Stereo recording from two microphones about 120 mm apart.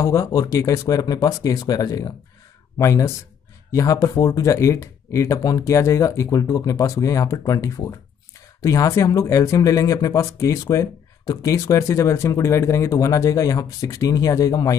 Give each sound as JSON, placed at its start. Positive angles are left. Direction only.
{"t": 0.0, "sound": "speech", "side_deg": 25}